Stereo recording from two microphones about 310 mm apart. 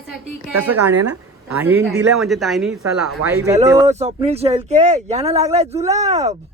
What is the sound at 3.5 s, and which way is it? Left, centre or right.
Speech, right.